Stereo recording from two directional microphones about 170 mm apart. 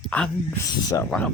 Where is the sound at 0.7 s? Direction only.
20° left (ahead or behind).